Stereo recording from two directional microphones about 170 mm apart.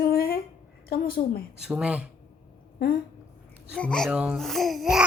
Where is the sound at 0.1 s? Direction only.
60° left (ahead or behind).